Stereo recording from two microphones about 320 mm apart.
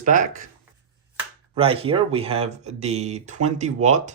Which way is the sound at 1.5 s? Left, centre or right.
Centre.